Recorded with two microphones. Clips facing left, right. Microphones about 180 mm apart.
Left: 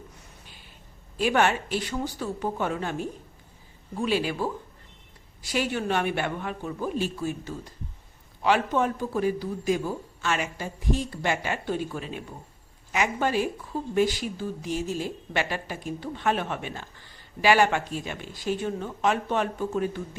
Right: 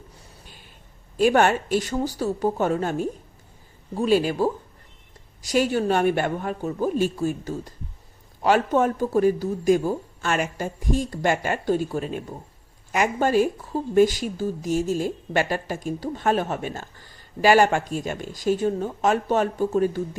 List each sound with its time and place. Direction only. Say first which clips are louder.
1.1 s speech: right 5 dB; 45° right (ahead or behind)